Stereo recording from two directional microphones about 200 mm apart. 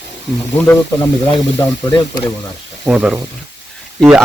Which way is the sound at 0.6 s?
10° left (ahead or behind).